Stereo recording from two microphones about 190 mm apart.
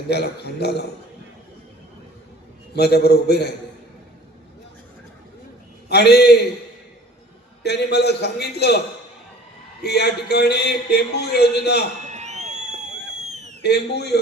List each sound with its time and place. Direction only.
0.1 s speech: 60° left (ahead or behind)
2.7 s speech: 60° left (ahead or behind)
5.9 s speech: 60° left (ahead or behind)
7.6 s speech: 60° left (ahead or behind)
9.8 s speech: 60° left (ahead or behind)
12.1 s crowd: 35° right (ahead or behind)
13.6 s speech: 60° left (ahead or behind)